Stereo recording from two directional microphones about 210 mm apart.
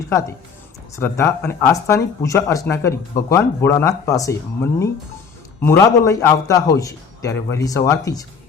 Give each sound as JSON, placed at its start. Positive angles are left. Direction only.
{"t": 0.9, "sound": "a man's voice", "side_deg": 15}